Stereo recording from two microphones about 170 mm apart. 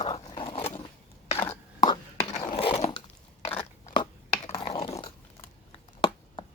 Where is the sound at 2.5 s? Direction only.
30° left (ahead or behind).